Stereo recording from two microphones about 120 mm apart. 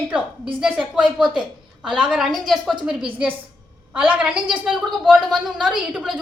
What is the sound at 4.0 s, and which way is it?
A woman's voice, 10° right (ahead or behind).